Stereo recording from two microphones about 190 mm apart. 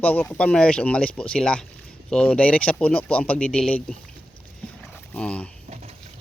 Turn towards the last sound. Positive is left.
turn(degrees=-35)  # may be behind; listen again after turning